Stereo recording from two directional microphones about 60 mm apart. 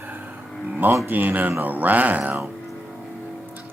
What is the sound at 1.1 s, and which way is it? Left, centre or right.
Speech, right.